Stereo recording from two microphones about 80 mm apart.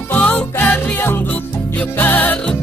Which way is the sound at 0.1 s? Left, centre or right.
Left.